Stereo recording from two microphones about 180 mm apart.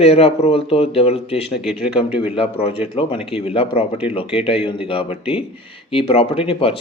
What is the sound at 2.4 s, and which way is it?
Speech, 30° left (ahead or behind).